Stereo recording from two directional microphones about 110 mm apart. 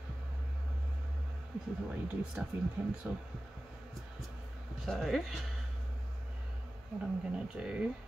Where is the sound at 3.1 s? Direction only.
20° right (ahead or behind).